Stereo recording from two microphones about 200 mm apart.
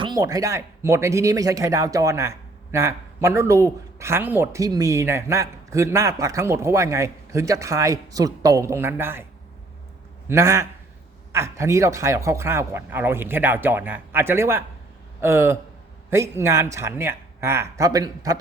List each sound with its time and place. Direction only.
0.0 s speech: 20° right (ahead or behind)
10.2 s speech: 15° right (ahead or behind)